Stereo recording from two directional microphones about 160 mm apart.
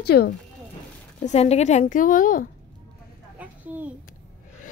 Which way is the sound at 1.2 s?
40° left (ahead or behind).